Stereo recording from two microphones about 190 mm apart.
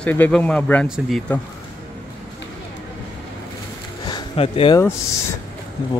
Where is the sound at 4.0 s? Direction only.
25° left (ahead or behind).